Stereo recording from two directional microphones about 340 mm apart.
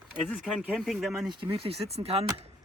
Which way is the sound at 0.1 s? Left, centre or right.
Centre.